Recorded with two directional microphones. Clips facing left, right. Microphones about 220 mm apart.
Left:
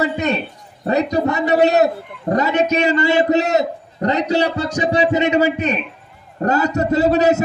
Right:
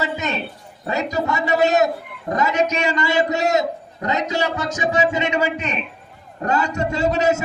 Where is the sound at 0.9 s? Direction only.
35° left (ahead or behind).